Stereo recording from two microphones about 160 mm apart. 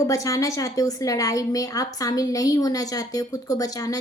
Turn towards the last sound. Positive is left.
turn(degrees=25)  # may be behind; listen again after turning